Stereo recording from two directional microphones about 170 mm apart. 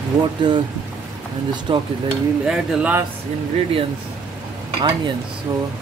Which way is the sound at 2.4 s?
10° right (ahead or behind).